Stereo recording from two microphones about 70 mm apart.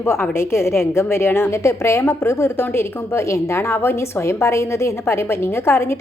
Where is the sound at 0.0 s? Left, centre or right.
Left.